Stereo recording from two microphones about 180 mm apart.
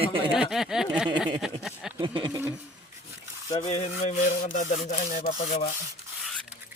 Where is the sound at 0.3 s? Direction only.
Centre (ahead or behind).